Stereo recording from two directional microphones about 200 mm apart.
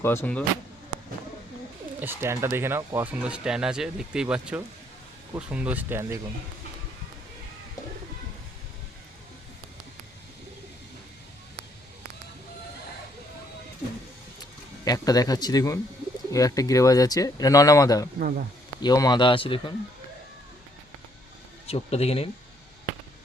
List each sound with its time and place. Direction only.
0.0 s speech: 10° left (ahead or behind)
2.0 s speech: 10° right (ahead or behind)
14.8 s speech: 20° left (ahead or behind)
18.2 s speech: 50° right (ahead or behind)
18.8 s speech: 20° left (ahead or behind)
21.7 s speech: 30° left (ahead or behind)